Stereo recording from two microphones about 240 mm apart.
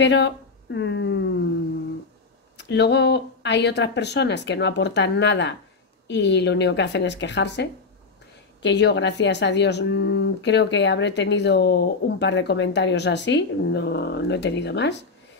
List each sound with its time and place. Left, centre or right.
0.0 s a woman's voice: left
2.5 s speech: left
8.6 s speech: left